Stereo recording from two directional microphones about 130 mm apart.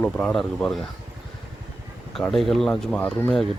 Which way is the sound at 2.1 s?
Centre (ahead or behind).